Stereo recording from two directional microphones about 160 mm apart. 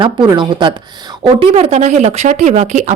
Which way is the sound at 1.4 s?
40° right (ahead or behind).